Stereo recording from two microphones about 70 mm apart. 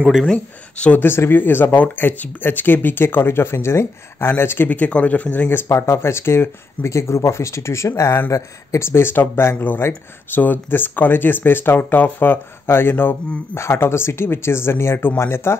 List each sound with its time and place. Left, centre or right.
0.3 s speech: centre
1.0 s speech: left
4.6 s speech: left
5.7 s speech: left